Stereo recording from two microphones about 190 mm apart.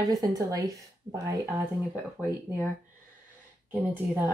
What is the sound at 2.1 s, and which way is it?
Speech, 10° left (ahead or behind).